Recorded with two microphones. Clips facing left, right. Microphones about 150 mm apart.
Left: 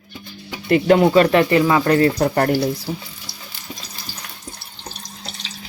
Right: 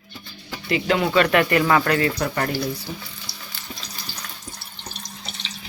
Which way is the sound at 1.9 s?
35° left (ahead or behind).